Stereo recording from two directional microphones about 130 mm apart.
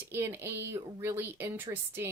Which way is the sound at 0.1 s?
20° right (ahead or behind).